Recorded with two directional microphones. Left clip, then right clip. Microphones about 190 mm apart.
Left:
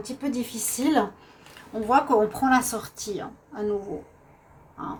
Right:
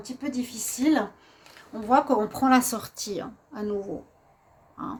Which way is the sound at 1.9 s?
55° right (ahead or behind).